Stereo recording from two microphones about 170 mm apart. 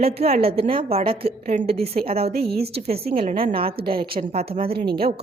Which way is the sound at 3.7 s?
65° right (ahead or behind).